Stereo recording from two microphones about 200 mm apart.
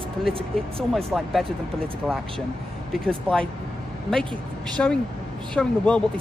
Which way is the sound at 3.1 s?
5° left (ahead or behind).